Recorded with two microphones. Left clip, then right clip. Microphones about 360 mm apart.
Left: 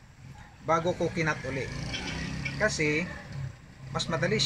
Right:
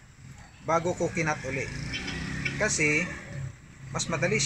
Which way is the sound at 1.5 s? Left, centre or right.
Left.